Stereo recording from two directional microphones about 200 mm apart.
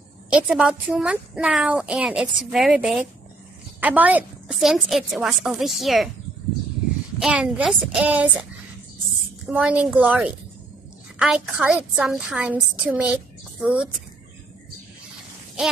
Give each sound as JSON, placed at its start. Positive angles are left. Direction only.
{"t": 0.3, "sound": "a woman's voice", "side_deg": -5}
{"t": 7.2, "sound": "a woman's voice", "side_deg": -5}
{"t": 9.5, "sound": "a woman's voice", "side_deg": -5}